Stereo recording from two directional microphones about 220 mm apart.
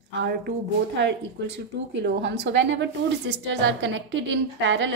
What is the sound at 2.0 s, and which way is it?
A woman's voice, 50° right (ahead or behind).